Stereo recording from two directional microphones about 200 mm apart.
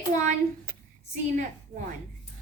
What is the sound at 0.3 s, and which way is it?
Speech, 45° right (ahead or behind).